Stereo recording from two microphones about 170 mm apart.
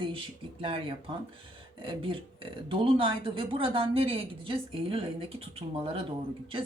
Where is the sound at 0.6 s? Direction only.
30° right (ahead or behind).